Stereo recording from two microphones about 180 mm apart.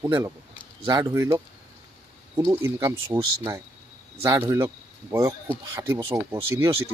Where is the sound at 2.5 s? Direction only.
15° right (ahead or behind).